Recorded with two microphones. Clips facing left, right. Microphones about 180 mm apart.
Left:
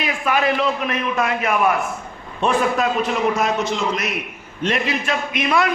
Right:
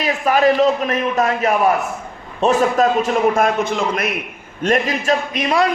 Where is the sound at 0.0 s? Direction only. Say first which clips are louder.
Right 5 dB; 40° right (ahead or behind); by 4.2 s 55° right (ahead or behind).